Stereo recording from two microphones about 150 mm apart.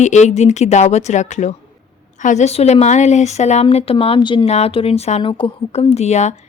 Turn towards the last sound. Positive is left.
turn(degrees=50)  # may be behind; listen again after turning